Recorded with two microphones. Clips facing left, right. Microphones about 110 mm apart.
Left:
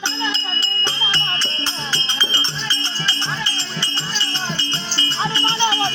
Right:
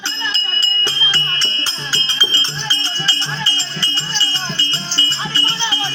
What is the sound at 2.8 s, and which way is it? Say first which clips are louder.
Music: right 1 dB; 20° left (ahead or behind).